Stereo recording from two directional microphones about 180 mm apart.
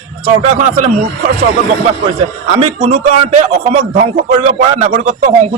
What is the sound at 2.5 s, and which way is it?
Speech, 35° right (ahead or behind).